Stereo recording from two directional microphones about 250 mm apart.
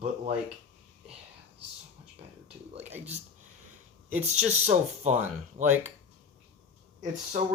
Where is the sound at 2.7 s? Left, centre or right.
Right.